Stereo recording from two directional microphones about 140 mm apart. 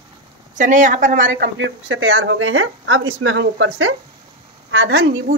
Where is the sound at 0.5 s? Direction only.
60° right (ahead or behind).